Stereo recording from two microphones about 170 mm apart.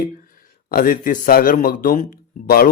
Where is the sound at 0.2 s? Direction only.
55° left (ahead or behind).